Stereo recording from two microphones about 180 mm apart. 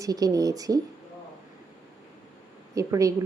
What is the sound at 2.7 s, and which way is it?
Speech, 15° right (ahead or behind).